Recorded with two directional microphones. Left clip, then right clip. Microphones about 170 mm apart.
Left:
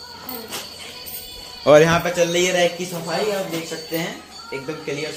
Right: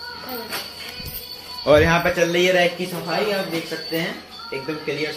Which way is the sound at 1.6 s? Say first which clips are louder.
Left 3 dB; 50° left (ahead or behind).